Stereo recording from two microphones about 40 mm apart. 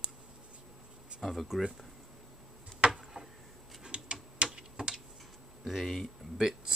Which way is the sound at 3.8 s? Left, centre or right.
Right.